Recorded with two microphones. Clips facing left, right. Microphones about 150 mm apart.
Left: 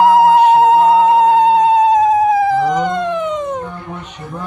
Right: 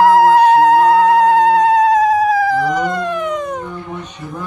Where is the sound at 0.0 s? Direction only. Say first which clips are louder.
Even; 20° left (ahead or behind).